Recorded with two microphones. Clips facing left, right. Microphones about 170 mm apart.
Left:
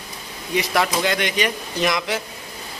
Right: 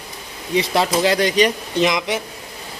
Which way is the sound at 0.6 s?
30° right (ahead or behind).